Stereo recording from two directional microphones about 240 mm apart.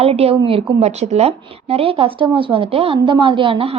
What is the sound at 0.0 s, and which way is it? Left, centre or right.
A woman's voice, right.